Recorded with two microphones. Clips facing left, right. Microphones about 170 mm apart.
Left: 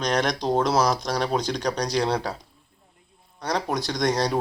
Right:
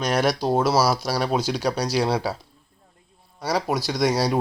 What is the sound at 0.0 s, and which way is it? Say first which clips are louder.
Speech: right 2 dB; 5° right (ahead or behind).